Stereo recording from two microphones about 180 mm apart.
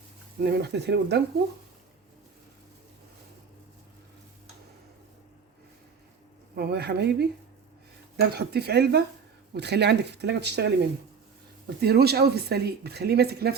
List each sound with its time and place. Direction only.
0.4 s speech: 65° right (ahead or behind)
6.6 s speech: 65° right (ahead or behind)
11.8 s speech: 60° right (ahead or behind)